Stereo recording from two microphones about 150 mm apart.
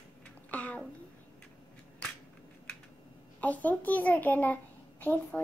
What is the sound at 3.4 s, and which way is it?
A child's voice, 10° left (ahead or behind).